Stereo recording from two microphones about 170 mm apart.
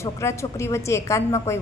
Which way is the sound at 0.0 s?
15° left (ahead or behind).